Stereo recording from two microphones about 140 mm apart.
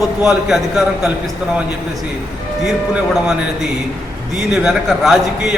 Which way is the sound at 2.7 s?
5° right (ahead or behind).